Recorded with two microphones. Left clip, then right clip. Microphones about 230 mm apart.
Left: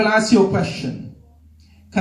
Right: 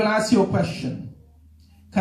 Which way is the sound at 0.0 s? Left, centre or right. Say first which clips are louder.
Left 4 dB; left.